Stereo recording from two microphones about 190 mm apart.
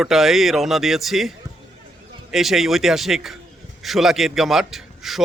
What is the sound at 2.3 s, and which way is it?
A man's voice, centre (ahead or behind).